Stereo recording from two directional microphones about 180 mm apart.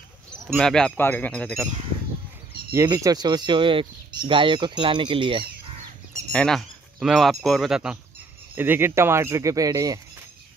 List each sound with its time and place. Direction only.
0.3 s speech: 5° left (ahead or behind)
2.7 s speech: 15° right (ahead or behind)
6.3 s speech: centre (ahead or behind); by 9.9 s 20° right (ahead or behind)